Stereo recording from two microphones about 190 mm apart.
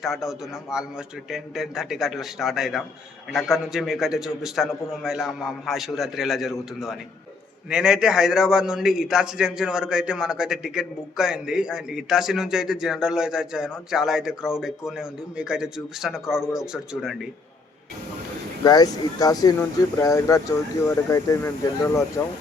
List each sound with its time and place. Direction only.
0.0 s a man's voice: centre (ahead or behind)
18.6 s speech: 20° left (ahead or behind)